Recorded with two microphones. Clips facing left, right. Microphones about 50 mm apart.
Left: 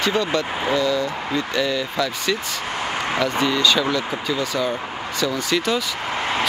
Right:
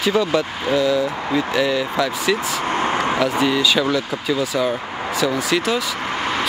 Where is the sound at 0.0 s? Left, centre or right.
Centre.